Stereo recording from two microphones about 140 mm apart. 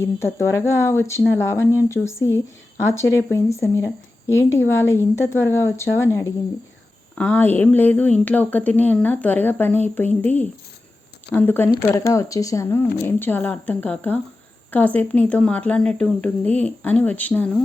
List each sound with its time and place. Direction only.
0.3 s speech: 20° left (ahead or behind)